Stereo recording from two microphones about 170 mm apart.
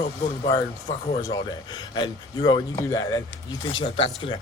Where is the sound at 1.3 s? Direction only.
25° left (ahead or behind).